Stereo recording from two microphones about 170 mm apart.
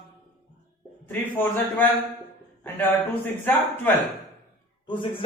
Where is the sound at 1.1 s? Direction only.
10° left (ahead or behind).